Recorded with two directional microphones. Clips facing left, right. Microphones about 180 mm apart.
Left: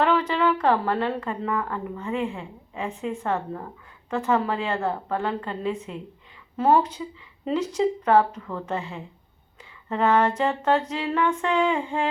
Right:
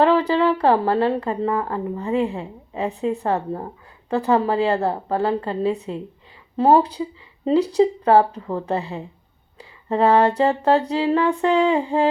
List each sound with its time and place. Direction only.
0.0 s speech: 35° right (ahead or behind)